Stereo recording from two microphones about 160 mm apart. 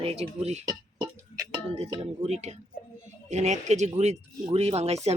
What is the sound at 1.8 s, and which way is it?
A woman's voice, 40° right (ahead or behind).